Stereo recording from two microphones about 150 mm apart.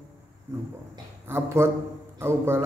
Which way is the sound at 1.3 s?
15° right (ahead or behind).